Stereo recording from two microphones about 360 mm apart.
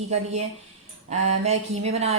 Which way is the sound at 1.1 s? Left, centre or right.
Centre.